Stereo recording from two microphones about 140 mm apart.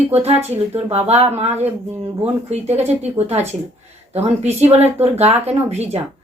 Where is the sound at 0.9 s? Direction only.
50° right (ahead or behind).